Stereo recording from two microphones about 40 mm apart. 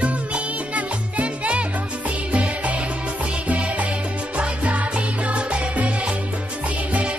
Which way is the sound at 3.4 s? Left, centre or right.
Right.